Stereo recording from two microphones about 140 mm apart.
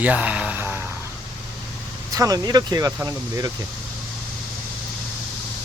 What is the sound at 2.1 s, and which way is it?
Speech, 25° right (ahead or behind).